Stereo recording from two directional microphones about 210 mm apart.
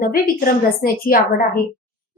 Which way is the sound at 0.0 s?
45° left (ahead or behind).